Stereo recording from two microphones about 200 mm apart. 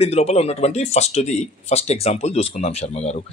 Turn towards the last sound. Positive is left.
turn(degrees=30)  # may be behind; listen again after turning